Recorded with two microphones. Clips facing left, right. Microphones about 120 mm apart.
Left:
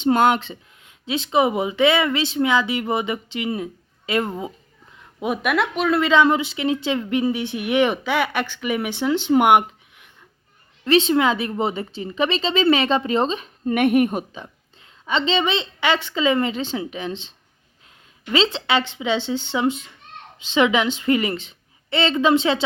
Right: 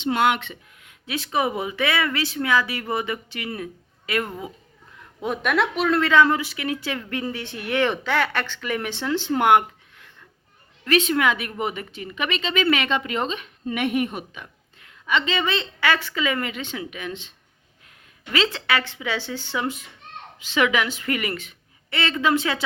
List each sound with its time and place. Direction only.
0.0 s speech: 40° left (ahead or behind); by 4.5 s 25° left (ahead or behind)
4.9 s speech: 10° left (ahead or behind)
6.0 s a woman's voice: 20° left (ahead or behind); by 13.7 s 35° left (ahead or behind)
13.7 s a woman's voice: 50° left (ahead or behind)
14.3 s a woman's voice: 30° left (ahead or behind)